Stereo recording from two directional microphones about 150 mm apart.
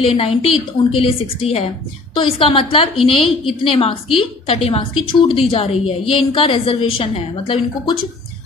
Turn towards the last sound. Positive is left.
turn(degrees=35)  # may be behind; listen again after turning